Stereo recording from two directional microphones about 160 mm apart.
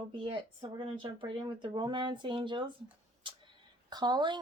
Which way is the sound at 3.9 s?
25° right (ahead or behind).